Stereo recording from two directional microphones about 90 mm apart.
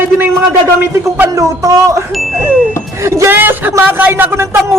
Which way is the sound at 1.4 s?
40° right (ahead or behind).